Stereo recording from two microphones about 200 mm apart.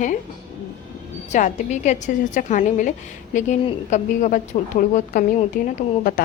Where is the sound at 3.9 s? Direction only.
40° left (ahead or behind).